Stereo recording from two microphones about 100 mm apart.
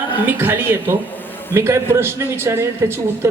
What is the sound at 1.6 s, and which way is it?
A man's voice, 30° right (ahead or behind).